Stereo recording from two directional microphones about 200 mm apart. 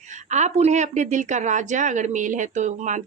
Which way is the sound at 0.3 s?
35° right (ahead or behind).